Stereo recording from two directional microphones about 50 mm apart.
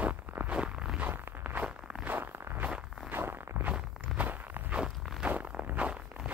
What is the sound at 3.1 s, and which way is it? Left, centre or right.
Walk, right.